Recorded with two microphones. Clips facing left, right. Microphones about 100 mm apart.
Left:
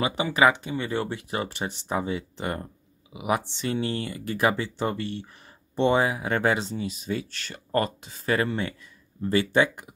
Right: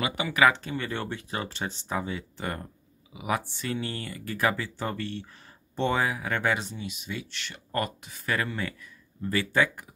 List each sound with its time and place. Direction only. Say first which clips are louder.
0.0 s speech: left 2 dB; 30° left (ahead or behind)